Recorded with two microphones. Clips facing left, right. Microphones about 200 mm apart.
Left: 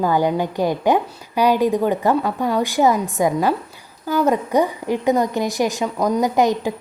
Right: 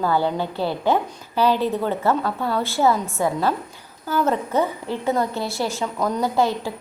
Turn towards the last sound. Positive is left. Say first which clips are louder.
# left 4 dB
turn(degrees=15)  # may be behind; listen again after turning